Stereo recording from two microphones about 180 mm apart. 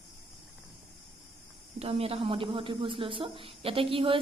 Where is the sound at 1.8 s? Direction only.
35° right (ahead or behind).